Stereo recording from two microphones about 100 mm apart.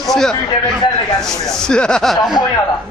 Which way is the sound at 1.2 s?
5° left (ahead or behind).